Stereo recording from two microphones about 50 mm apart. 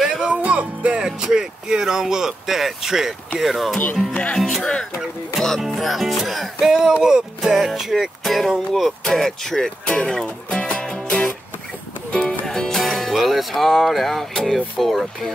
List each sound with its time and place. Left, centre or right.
0.0 s music: centre
0.4 s speech: right; by 3.2 s centre
3.3 s music: centre
6.7 s speech: centre
8.2 s music: centre
9.0 s speech: centre
9.8 s music: centre
12.4 s speech: centre